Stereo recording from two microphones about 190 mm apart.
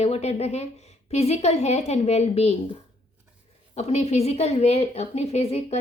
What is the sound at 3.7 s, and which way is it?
A woman's voice, 35° left (ahead or behind).